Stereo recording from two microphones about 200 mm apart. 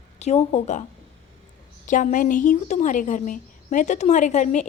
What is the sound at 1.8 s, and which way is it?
A woman's voice, 40° left (ahead or behind).